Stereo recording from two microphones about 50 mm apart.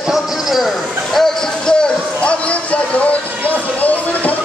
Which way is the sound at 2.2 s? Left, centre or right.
Left.